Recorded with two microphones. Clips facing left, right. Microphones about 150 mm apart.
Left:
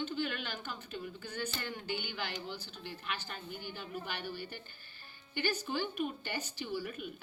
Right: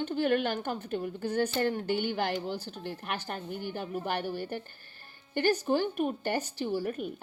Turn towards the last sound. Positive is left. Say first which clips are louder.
# right 8 dB
turn(degrees=-50)  # may be behind; listen again after turning